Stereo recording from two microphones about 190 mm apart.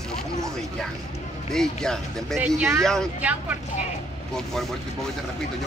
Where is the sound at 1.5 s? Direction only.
5° left (ahead or behind).